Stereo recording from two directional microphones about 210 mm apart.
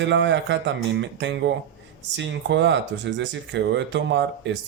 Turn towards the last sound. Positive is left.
turn(degrees=-55)  # may be behind; listen again after turning